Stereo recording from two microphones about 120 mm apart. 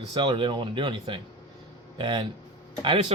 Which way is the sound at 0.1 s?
40° right (ahead or behind).